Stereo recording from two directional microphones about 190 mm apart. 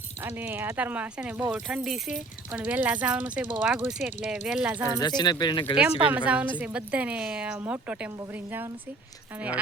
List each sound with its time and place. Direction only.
0.2 s a woman's voice: 10° right (ahead or behind)
4.9 s speech: 20° left (ahead or behind)
6.1 s a woman's voice: 5° right (ahead or behind)